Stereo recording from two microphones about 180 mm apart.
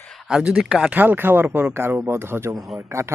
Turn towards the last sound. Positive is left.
turn(degrees=-15)  # may be behind; listen again after turning